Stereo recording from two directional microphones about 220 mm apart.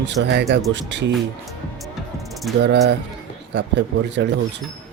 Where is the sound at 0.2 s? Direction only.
50° right (ahead or behind).